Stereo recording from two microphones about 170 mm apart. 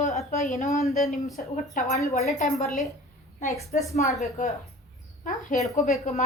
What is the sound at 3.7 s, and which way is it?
Speech, 50° left (ahead or behind).